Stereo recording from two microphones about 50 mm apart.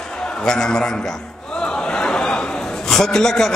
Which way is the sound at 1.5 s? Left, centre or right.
Centre.